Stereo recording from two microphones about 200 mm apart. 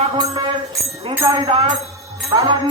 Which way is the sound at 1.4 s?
30° right (ahead or behind).